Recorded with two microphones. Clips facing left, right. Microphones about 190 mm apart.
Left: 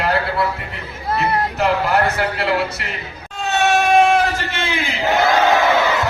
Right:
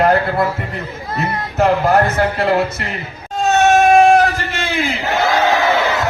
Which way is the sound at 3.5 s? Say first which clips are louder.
Right 5 dB; 45° right (ahead or behind).